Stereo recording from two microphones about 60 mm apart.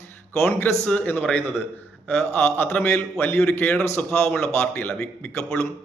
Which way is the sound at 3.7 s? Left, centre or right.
Centre.